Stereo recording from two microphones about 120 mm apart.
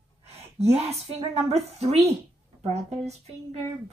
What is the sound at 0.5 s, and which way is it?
A woman's voice, 60° right (ahead or behind).